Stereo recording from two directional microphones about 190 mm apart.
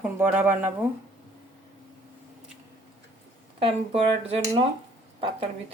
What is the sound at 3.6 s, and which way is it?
Speech, 30° right (ahead or behind).